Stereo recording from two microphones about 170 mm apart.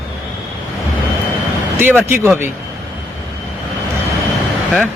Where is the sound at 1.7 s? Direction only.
10° right (ahead or behind).